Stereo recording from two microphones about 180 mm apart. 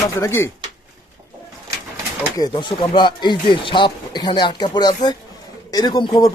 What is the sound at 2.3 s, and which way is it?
Speech, 25° left (ahead or behind).